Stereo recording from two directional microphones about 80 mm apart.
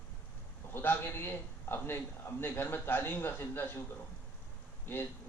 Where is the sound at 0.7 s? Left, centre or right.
Left.